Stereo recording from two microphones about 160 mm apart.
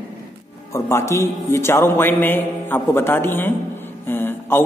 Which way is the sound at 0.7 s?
15° left (ahead or behind).